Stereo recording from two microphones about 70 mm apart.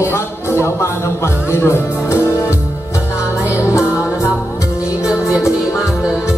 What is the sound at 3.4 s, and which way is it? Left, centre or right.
Music, left.